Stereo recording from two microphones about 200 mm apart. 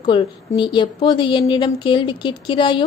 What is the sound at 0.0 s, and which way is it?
A woman's voice, 25° left (ahead or behind).